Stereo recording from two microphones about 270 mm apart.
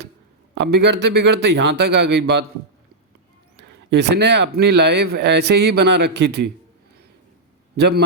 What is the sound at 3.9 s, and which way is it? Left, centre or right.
Speech, right.